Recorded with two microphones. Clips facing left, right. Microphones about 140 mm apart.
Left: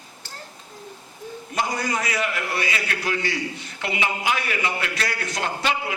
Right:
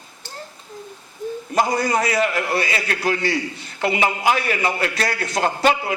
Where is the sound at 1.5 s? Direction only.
40° right (ahead or behind).